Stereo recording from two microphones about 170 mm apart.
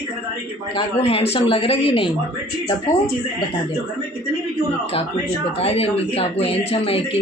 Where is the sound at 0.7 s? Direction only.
35° left (ahead or behind).